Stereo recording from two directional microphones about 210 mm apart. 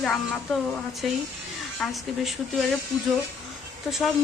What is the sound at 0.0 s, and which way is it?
A woman's voice, centre (ahead or behind).